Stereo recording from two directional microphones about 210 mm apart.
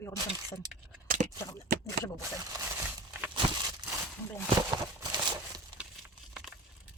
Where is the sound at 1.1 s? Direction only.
35° right (ahead or behind).